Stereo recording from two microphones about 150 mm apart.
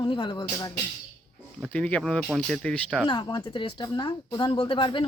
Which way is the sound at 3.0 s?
30° left (ahead or behind).